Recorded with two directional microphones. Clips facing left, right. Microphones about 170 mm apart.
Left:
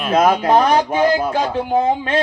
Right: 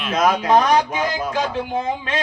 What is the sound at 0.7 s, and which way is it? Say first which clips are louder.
Speech: left 5 dB; 35° left (ahead or behind).